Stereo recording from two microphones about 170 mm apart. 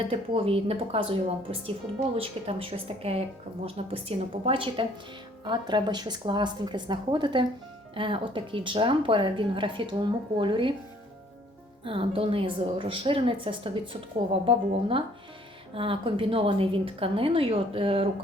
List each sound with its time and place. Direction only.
0.1 s a woman's voice: 35° right (ahead or behind)
11.9 s a woman's voice: 30° right (ahead or behind)